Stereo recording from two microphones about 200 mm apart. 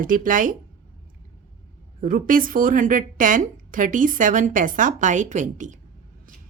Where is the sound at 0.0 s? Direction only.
40° right (ahead or behind).